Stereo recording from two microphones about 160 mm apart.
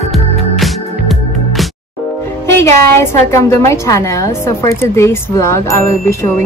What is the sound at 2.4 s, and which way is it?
A woman's voice, 15° left (ahead or behind).